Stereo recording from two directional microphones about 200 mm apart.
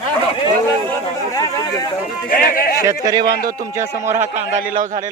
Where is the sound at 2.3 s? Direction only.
45° left (ahead or behind).